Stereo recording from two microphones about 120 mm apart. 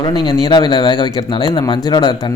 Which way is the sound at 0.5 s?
40° left (ahead or behind).